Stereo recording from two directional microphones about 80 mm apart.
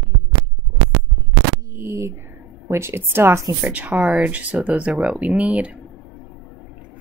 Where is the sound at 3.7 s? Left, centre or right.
Centre.